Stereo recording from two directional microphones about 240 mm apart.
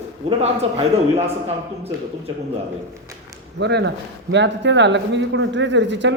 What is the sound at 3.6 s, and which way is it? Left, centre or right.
Speech, right.